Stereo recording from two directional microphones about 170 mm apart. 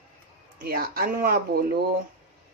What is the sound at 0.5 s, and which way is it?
Speech, 60° right (ahead or behind).